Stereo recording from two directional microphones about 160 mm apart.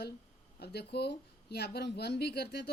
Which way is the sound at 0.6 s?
90° left.